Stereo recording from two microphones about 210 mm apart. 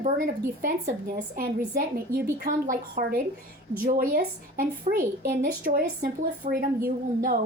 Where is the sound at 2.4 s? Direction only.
40° right (ahead or behind).